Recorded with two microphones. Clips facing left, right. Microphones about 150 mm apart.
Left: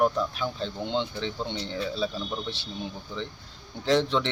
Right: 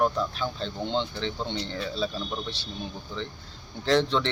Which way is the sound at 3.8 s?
10° left (ahead or behind).